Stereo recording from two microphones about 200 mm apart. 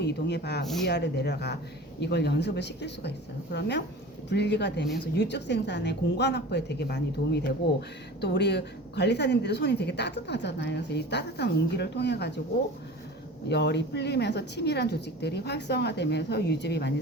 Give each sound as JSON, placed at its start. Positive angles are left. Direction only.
{"t": 0.0, "sound": "a woman's voice", "side_deg": 55}
{"t": 13.5, "sound": "a woman's voice", "side_deg": 60}